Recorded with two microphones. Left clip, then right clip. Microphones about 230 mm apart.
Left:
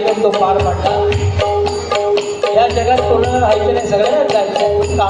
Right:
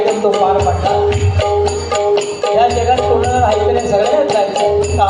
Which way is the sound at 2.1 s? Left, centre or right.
Left.